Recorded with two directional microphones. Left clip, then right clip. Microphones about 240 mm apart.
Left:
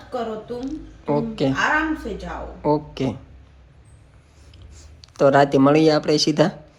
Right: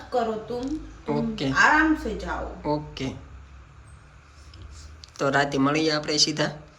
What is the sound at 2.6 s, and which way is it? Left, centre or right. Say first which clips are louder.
Speech: left 8 dB; centre.